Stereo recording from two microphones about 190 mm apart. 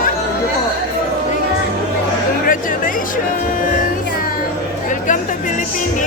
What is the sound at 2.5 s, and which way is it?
Music, 45° left (ahead or behind).